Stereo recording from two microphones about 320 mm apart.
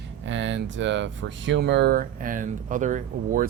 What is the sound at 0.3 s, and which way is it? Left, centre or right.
Speech, right.